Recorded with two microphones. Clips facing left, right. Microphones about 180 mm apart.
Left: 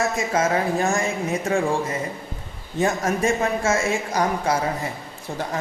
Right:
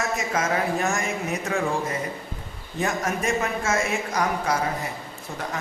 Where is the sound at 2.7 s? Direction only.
30° left (ahead or behind).